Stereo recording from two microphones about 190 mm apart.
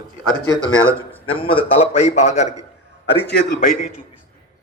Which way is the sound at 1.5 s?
35° left (ahead or behind).